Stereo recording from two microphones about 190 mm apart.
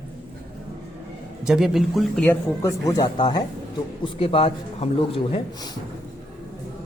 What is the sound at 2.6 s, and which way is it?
Speech, 20° left (ahead or behind).